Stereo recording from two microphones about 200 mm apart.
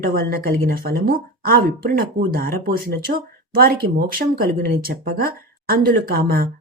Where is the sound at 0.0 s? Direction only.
50° right (ahead or behind).